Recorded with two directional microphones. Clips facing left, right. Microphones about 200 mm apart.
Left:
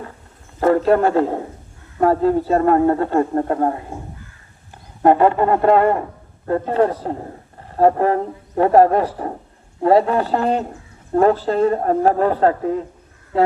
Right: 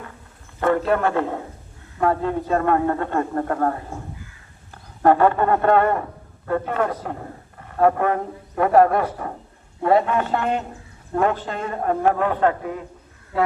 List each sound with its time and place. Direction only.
0.6 s a man's voice: 30° left (ahead or behind)
5.0 s a man's voice: 25° left (ahead or behind)